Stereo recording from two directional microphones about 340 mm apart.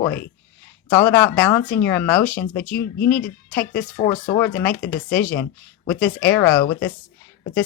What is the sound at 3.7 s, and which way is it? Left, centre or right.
Speech, left.